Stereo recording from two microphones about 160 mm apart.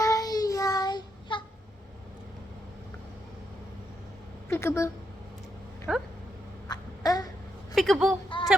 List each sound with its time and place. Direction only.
0.0 s child singing: 20° left (ahead or behind)
4.4 s a sound: 15° left (ahead or behind)
5.9 s a sound: 5° right (ahead or behind)
6.7 s babbling: 25° left (ahead or behind)
7.8 s speech: centre (ahead or behind)
8.3 s female singing: 30° left (ahead or behind)